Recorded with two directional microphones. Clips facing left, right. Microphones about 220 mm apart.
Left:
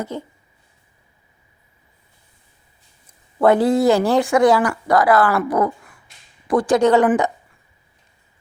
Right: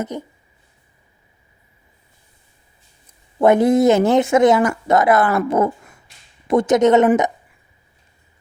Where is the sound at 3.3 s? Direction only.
20° right (ahead or behind).